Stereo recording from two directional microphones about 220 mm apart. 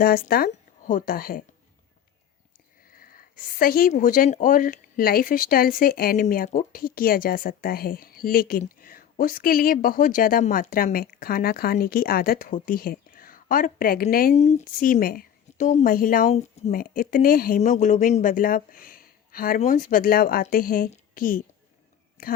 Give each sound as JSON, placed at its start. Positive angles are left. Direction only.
{"t": 0.0, "sound": "speech", "side_deg": 40}
{"t": 2.9, "sound": "speech", "side_deg": 40}